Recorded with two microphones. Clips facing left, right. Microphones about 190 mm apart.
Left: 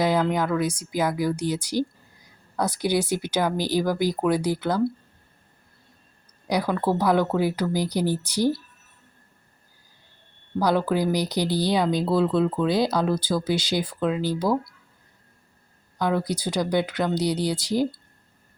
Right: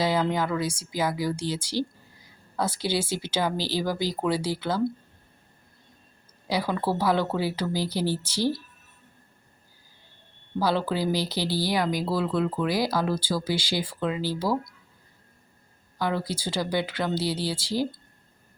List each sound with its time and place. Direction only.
0.3 s speech: 15° left (ahead or behind)
6.6 s speech: 5° right (ahead or behind)
7.0 s speech: 15° left (ahead or behind)
10.6 s speech: 15° left (ahead or behind)
16.0 s speech: 20° left (ahead or behind)